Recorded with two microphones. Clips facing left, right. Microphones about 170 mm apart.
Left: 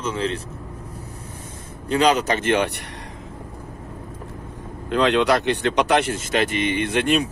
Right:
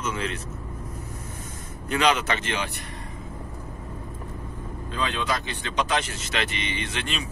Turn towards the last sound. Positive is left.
turn(degrees=55)  # may be behind; listen again after turning